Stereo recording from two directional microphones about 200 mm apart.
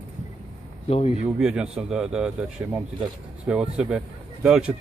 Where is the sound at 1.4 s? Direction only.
5° right (ahead or behind).